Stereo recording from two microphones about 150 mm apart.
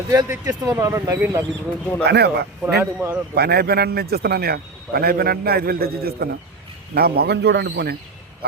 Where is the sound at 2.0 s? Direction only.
90° right.